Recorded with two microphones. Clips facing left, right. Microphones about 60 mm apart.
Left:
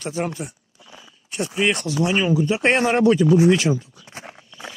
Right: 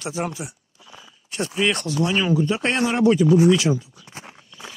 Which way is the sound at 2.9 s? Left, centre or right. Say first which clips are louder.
Right 2 dB; left.